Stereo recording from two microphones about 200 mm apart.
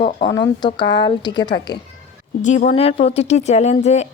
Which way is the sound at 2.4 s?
35° left (ahead or behind).